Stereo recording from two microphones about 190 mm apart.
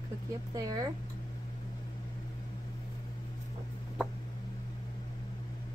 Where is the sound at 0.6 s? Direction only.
20° right (ahead or behind).